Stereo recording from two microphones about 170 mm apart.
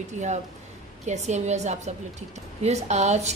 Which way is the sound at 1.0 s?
40° right (ahead or behind).